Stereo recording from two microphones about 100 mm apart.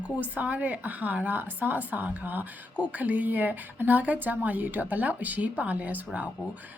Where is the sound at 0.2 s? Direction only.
15° right (ahead or behind).